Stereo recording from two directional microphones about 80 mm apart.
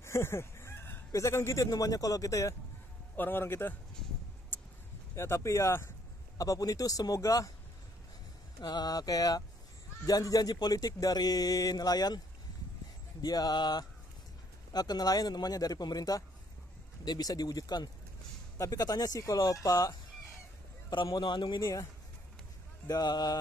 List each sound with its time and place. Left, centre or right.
0.0 s chicken: left
1.1 s speech: left
3.2 s a man's voice: left
5.1 s speech: left
6.3 s speech: left
8.5 s speech: left
13.2 s speech: left
20.9 s a man's voice: left
22.8 s speech: left